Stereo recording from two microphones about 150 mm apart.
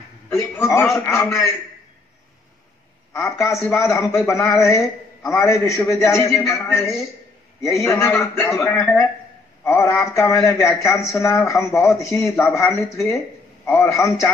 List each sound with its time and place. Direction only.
0.3 s a man's voice: 20° left (ahead or behind)
3.1 s a man's voice: 20° left (ahead or behind)